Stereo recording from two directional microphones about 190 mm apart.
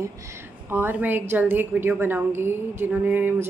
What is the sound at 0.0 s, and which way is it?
A woman's voice, 15° right (ahead or behind).